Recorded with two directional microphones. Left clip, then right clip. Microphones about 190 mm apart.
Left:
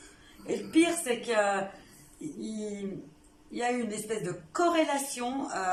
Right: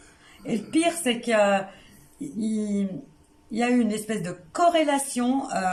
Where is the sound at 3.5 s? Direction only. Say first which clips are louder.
Right 7 dB; 45° right (ahead or behind).